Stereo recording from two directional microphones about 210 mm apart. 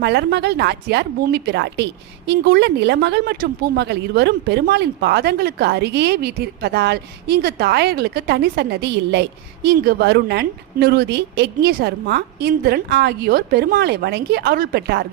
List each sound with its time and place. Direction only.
0.0 s a woman's voice: 50° right (ahead or behind)